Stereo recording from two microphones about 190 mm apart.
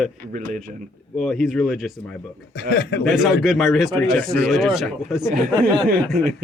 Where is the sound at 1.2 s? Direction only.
Centre (ahead or behind).